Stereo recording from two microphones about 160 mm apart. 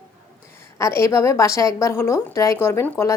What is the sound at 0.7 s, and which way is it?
A woman's voice, 20° left (ahead or behind).